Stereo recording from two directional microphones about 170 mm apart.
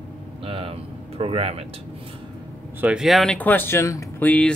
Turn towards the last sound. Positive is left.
turn(degrees=10)  # may be behind; listen again after turning